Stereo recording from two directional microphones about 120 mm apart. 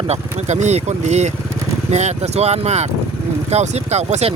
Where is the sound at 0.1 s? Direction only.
75° right (ahead or behind).